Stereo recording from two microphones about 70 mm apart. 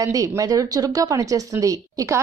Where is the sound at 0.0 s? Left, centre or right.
Right.